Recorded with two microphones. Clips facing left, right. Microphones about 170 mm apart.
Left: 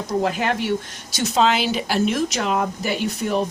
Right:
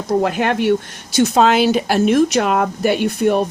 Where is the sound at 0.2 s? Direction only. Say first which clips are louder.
Right 2 dB; 60° right (ahead or behind).